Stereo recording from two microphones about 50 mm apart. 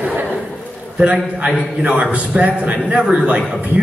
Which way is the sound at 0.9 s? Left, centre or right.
Right.